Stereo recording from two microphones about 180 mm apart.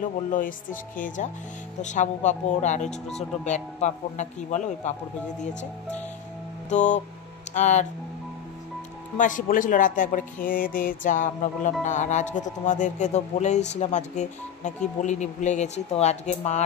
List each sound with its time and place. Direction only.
0.3 s speech: 50° left (ahead or behind)
6.7 s speech: 40° left (ahead or behind)
9.1 s speech: 45° left (ahead or behind)